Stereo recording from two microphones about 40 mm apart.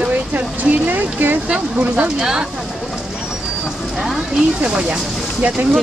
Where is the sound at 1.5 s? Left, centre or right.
Right.